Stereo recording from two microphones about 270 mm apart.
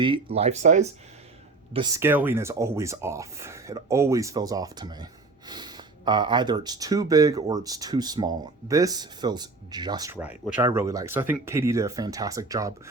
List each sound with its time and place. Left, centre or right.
0.0 s speech: centre
1.7 s speech: centre